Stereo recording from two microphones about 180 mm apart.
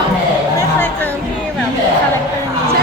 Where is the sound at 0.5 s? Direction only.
10° left (ahead or behind).